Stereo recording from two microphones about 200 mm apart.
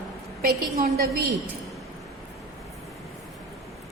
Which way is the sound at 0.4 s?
45° right (ahead or behind).